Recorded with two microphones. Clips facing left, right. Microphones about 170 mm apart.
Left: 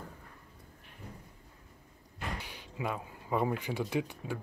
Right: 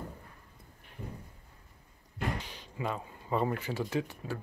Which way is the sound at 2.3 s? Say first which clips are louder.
Right 1 dB; 10° left (ahead or behind).